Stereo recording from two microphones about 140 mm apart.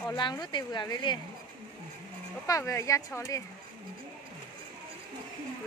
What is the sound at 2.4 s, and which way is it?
Speech, 20° left (ahead or behind).